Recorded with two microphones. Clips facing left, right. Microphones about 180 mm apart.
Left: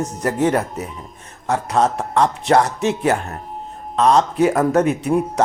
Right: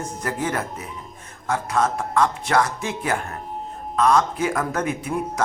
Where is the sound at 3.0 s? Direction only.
40° left (ahead or behind).